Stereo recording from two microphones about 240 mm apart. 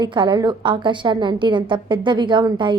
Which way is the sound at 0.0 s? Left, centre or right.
Centre.